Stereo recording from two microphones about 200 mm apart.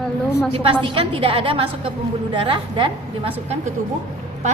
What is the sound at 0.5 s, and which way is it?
A woman's voice, 25° right (ahead or behind).